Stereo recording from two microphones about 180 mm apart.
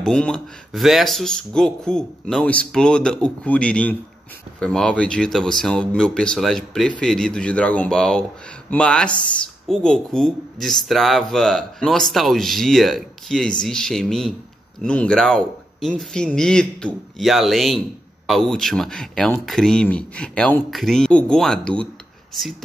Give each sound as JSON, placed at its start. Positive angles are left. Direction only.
{"t": 0.0, "sound": "speech", "side_deg": 5}